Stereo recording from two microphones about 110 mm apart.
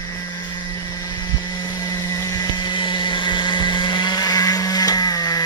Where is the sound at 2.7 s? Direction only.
45° left (ahead or behind).